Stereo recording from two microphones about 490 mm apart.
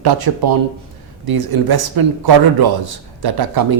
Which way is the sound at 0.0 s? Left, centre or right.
Right.